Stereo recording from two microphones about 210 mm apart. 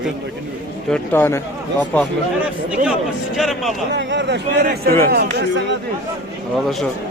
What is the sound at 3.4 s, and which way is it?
Speech, centre (ahead or behind).